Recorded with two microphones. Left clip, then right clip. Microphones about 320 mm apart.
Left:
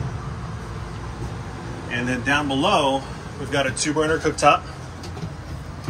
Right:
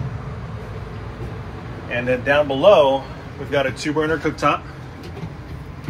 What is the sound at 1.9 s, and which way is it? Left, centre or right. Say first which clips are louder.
Speech: right 4 dB; centre.